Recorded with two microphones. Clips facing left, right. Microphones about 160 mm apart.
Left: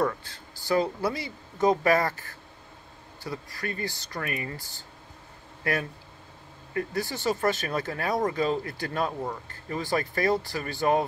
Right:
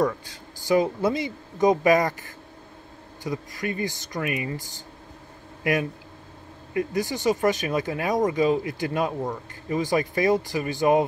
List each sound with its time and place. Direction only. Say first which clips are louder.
0.0 s speech: right 3 dB; 15° right (ahead or behind)